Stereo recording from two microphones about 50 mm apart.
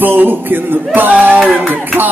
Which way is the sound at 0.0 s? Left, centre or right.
Right.